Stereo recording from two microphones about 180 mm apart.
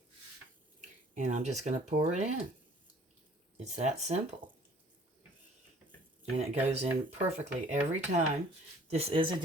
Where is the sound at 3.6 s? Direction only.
40° right (ahead or behind).